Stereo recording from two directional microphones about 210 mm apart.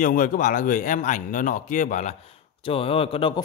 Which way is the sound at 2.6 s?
25° left (ahead or behind).